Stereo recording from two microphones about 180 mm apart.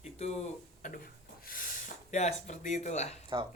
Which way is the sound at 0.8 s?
55° left (ahead or behind).